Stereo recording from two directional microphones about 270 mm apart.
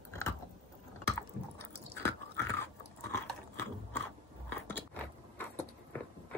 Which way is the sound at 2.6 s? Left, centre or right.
Centre.